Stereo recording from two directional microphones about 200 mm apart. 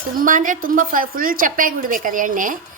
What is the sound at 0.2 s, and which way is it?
A woman's voice, 40° right (ahead or behind).